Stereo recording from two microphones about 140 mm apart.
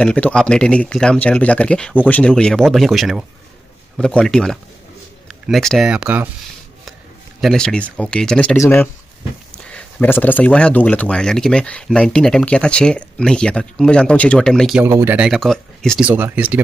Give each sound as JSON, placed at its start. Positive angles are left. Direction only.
{"t": 0.0, "sound": "speech", "side_deg": 10}
{"t": 7.3, "sound": "speech", "side_deg": 0}
{"t": 14.8, "sound": "speech", "side_deg": -15}
{"t": 15.1, "sound": "speech", "side_deg": -5}
{"t": 16.0, "sound": "speech", "side_deg": -15}